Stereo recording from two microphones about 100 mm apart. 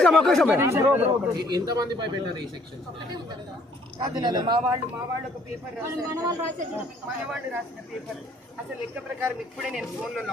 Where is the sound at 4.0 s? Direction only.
40° right (ahead or behind).